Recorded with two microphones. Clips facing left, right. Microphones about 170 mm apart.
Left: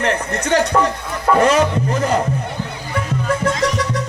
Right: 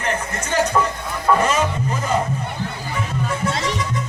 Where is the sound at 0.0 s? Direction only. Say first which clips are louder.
Left 5 dB; 75° left (ahead or behind).